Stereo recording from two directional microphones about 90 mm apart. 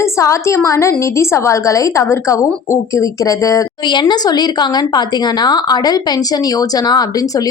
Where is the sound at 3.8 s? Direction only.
55° left (ahead or behind).